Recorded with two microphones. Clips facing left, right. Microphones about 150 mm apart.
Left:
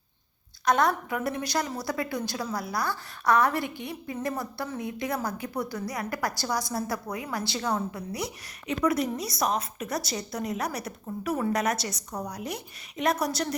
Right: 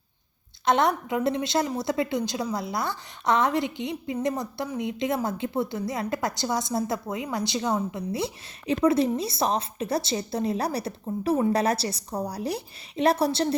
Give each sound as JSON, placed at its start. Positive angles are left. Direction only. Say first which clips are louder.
{"t": 0.6, "sound": "a woman's voice", "louder": "right 2 dB", "side_deg": -25}